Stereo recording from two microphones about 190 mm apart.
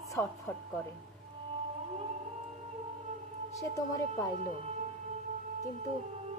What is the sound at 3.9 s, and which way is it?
Speech, 15° left (ahead or behind).